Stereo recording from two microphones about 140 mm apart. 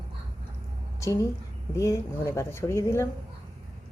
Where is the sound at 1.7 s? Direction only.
20° left (ahead or behind).